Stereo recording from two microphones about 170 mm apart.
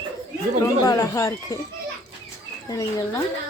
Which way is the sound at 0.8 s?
20° left (ahead or behind).